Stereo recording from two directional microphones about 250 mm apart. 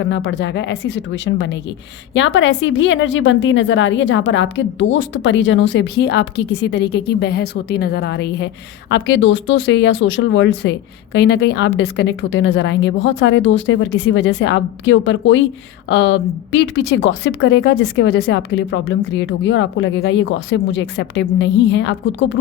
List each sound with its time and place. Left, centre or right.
0.0 s speech: left